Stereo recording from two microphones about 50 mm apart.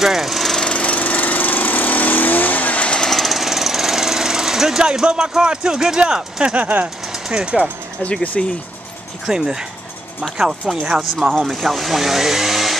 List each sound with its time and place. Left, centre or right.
0.0 s speech: centre
0.6 s lawn mower: left
3.0 s jackhammer: centre
6.5 s speech: right
7.2 s speech: centre
8.0 s speech: left
9.2 s speech: centre
11.1 s speech: centre